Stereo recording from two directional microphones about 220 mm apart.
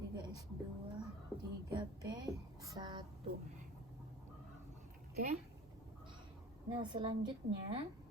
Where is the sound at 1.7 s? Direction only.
20° right (ahead or behind).